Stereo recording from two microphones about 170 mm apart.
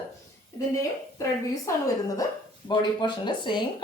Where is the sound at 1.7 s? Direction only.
20° left (ahead or behind).